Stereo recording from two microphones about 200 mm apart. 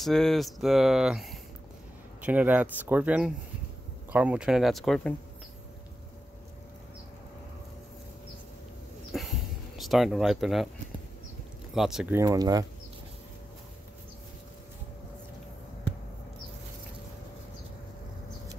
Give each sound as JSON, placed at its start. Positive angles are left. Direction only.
{"t": 0.0, "sound": "speech", "side_deg": 0}
{"t": 9.1, "sound": "a sound", "side_deg": 0}
{"t": 9.8, "sound": "speech", "side_deg": 0}
{"t": 11.7, "sound": "speech", "side_deg": 0}
{"t": 12.2, "sound": "speech", "side_deg": -15}